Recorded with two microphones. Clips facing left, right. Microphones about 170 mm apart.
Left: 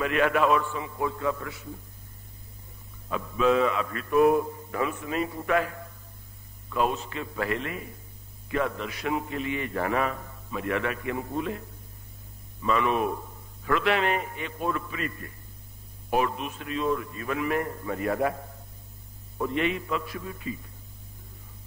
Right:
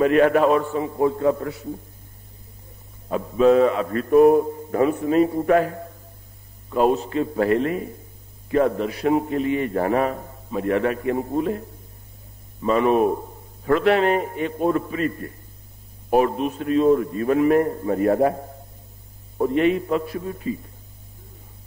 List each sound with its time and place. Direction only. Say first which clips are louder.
0.0 s a man's voice: right 8 dB; 40° right (ahead or behind)
3.1 s a man's voice: right 7 dB; 35° right (ahead or behind)
12.6 s a man's voice: right 7 dB; 40° right (ahead or behind)